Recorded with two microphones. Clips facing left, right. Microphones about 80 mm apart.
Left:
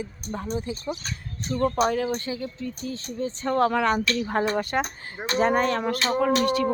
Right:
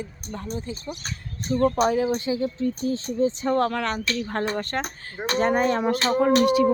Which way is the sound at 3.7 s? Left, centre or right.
Centre.